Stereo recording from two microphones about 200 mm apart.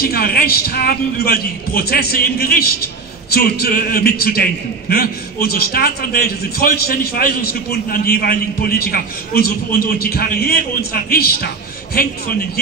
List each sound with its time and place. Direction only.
0.0 s a man's voice: 50° left (ahead or behind)